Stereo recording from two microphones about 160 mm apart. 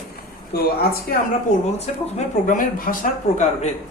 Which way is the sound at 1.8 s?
50° left (ahead or behind).